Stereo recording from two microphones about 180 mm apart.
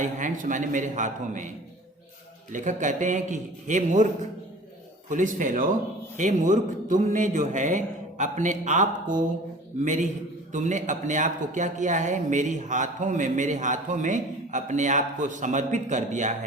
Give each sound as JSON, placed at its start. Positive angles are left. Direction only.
{"t": 0.0, "sound": "speech", "side_deg": -45}